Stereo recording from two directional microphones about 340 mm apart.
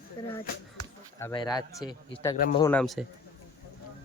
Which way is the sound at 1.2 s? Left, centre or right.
Centre.